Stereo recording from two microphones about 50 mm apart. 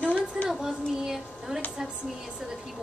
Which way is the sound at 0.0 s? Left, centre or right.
Left.